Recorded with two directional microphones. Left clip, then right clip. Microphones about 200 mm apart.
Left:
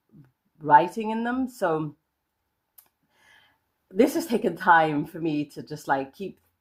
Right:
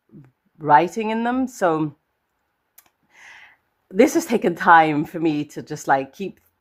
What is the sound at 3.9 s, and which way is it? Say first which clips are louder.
A woman's voice: right 6 dB; 35° right (ahead or behind).